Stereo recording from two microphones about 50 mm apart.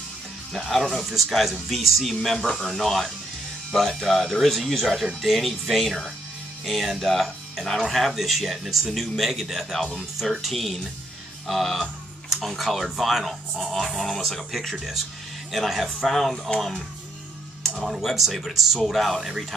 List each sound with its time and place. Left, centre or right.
0.5 s speech: centre
2.3 s speech: centre
2.7 s speech: centre
17.8 s speech: centre